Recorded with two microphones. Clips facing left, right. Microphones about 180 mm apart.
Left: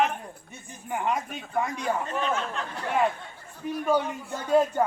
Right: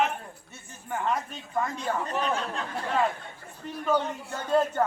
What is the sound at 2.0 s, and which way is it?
Speech, 40° right (ahead or behind).